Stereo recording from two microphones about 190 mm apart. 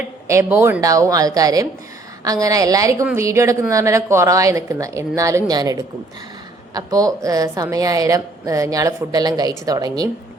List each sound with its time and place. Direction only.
0.3 s a woman's voice: 15° right (ahead or behind)